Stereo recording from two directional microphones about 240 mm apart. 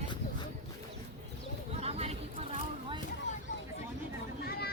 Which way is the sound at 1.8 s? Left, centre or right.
Right.